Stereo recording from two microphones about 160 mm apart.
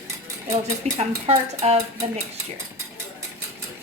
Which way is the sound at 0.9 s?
40° right (ahead or behind).